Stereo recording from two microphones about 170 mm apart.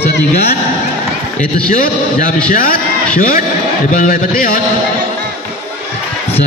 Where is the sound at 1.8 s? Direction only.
55° left (ahead or behind).